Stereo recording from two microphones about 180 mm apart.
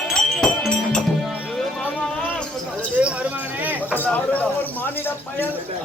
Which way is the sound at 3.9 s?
10° left (ahead or behind).